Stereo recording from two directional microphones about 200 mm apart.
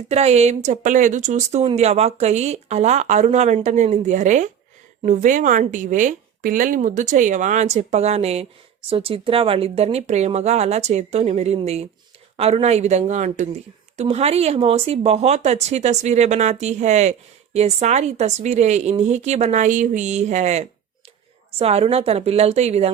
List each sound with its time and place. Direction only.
0.1 s speech: 35° right (ahead or behind)